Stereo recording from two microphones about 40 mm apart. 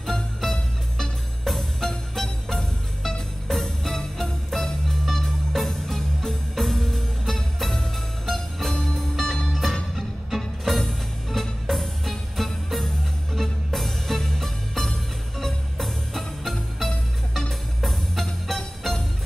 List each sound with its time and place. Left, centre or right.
0.0 s music: centre